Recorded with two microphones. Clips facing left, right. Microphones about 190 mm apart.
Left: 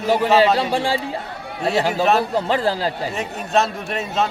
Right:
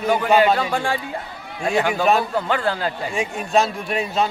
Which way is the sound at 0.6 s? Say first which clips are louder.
Left 2 dB; 30° left (ahead or behind).